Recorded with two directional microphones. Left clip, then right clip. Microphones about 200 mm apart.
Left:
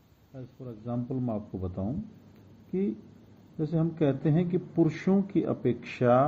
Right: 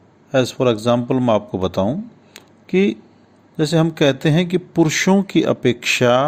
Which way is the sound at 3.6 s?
65° right (ahead or behind).